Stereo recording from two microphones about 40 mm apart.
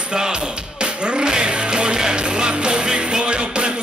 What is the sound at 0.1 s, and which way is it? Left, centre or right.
Music, centre.